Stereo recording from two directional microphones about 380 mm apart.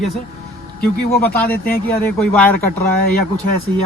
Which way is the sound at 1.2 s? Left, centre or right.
Centre.